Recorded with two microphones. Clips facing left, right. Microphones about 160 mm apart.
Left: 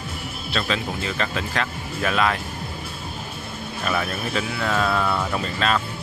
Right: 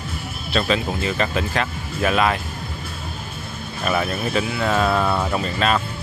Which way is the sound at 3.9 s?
25° right (ahead or behind).